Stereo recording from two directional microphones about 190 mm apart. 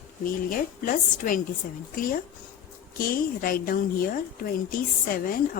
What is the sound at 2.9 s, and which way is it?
A woman's voice, 50° left (ahead or behind).